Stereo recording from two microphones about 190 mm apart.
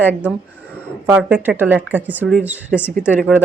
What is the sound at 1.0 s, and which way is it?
A woman's voice, 10° right (ahead or behind).